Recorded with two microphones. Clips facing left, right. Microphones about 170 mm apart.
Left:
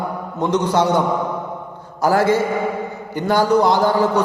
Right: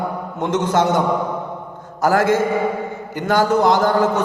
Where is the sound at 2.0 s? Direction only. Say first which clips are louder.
Even; 50° right (ahead or behind).